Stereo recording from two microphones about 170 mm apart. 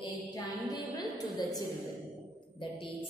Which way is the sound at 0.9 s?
20° left (ahead or behind).